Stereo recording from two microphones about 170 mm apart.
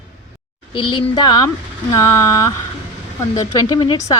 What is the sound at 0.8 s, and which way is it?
A woman's voice, 25° left (ahead or behind).